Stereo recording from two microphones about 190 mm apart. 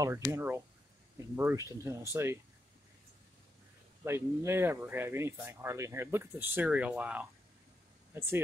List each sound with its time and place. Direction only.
0.3 s speech: 15° right (ahead or behind)
4.0 s speech: 15° right (ahead or behind)